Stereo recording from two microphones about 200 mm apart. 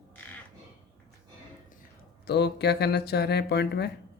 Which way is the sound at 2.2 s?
55° left (ahead or behind).